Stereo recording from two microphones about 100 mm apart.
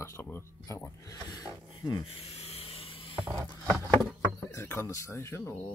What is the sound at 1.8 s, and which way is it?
Speech, 50° left (ahead or behind).